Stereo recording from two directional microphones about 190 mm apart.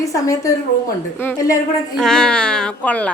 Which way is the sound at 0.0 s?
15° left (ahead or behind).